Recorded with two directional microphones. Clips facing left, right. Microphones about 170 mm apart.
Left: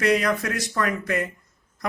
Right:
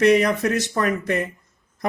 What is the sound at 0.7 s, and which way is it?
Speech, 25° right (ahead or behind).